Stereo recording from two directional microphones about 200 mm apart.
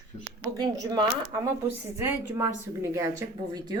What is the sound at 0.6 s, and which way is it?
Speech, 20° right (ahead or behind).